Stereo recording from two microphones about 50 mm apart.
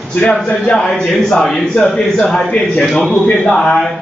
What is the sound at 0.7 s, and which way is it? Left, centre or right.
A man's voice, centre.